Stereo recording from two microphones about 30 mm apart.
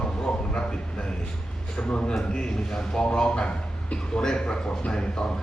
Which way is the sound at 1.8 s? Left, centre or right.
Left.